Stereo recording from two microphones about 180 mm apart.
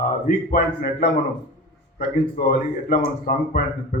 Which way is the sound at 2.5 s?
55° left (ahead or behind).